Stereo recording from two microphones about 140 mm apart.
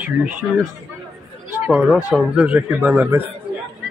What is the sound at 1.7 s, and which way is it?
A man's voice, centre (ahead or behind).